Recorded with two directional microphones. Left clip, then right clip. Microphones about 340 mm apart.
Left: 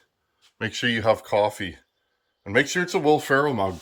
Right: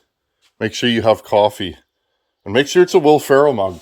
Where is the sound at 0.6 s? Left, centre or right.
Right.